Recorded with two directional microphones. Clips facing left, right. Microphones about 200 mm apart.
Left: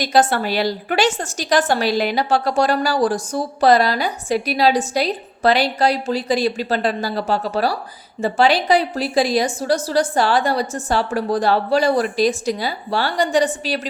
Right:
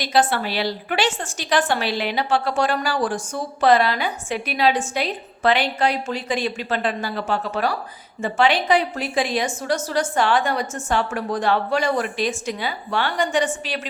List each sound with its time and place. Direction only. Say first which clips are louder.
0.0 s a woman's voice: left 3 dB; 45° left (ahead or behind)